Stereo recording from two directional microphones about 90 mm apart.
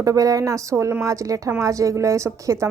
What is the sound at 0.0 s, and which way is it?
Speech, 40° right (ahead or behind).